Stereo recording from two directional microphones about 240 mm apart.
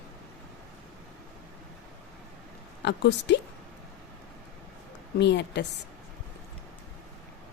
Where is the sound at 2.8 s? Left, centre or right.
Left.